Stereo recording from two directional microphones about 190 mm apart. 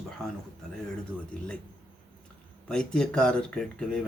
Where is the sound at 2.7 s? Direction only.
5° left (ahead or behind).